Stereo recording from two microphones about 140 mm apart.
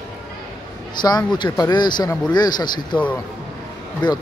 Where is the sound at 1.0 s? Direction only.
30° left (ahead or behind).